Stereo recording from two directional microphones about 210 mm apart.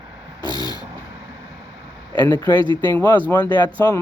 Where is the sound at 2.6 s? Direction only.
20° right (ahead or behind).